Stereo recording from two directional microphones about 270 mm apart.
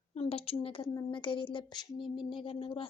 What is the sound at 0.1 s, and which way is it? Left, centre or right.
A woman's voice, left.